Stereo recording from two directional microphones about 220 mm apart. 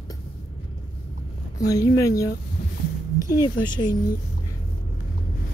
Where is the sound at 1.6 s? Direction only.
15° left (ahead or behind).